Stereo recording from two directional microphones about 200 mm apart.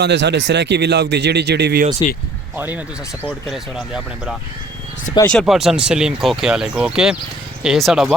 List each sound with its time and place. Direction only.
0.0 s speech: 60° right (ahead or behind)
2.6 s speech: 10° right (ahead or behind)
3.2 s speech: centre (ahead or behind)